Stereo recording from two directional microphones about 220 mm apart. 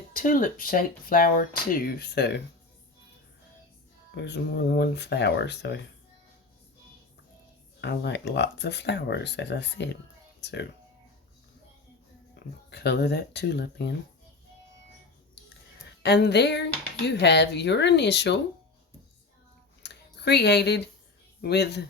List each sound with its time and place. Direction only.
0.1 s speech: 40° left (ahead or behind)
4.1 s speech: 50° left (ahead or behind)
7.8 s speech: 50° left (ahead or behind)
12.4 s a sound: 50° left (ahead or behind)
12.7 s speech: 50° left (ahead or behind)
16.0 s speech: 50° left (ahead or behind)
19.8 s a sound: 50° left (ahead or behind)
21.4 s speech: 50° left (ahead or behind)